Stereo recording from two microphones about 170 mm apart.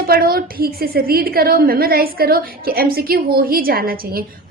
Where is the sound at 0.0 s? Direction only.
60° right (ahead or behind).